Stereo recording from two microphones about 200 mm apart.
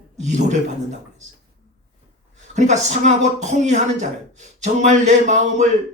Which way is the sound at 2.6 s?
35° right (ahead or behind).